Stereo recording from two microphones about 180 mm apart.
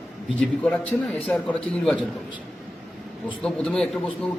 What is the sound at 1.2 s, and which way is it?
Speech, 5° left (ahead or behind).